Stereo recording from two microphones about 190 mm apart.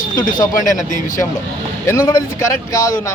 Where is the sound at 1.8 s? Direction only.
20° left (ahead or behind).